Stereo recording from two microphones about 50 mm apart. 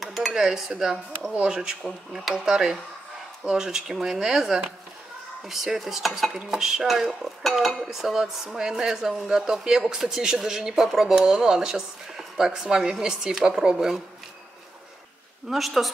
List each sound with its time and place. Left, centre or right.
0.0 s dishes: centre
1.3 s speech: right
1.9 s dishes: centre
2.3 s dishes: centre
15.5 s dishes: centre